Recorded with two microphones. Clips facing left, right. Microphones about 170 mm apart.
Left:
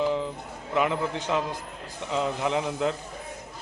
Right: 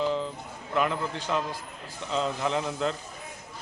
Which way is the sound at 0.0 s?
15° left (ahead or behind).